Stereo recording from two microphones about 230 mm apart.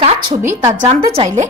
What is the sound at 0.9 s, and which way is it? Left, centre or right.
Speech, right.